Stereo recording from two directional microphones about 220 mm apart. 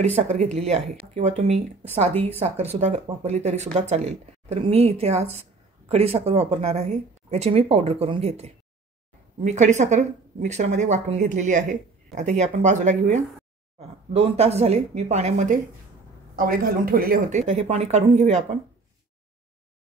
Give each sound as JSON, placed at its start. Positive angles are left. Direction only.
{"t": 0.0, "sound": "speech", "side_deg": -30}